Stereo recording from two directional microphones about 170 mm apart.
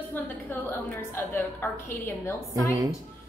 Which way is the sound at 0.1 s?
15° left (ahead or behind).